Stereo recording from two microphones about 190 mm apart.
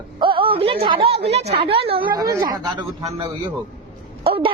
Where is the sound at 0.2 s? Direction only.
25° right (ahead or behind).